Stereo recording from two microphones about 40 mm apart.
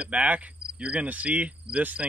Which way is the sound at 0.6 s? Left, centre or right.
Right.